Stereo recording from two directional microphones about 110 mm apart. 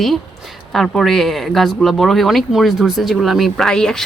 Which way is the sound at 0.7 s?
Centre (ahead or behind).